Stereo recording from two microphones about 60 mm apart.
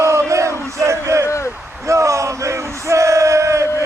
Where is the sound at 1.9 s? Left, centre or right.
Right.